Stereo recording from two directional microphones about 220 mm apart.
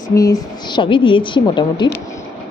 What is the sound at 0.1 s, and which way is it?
A woman's voice, 15° left (ahead or behind).